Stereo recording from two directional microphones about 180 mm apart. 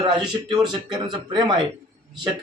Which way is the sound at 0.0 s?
25° right (ahead or behind).